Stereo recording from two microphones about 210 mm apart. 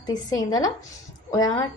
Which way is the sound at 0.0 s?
20° left (ahead or behind).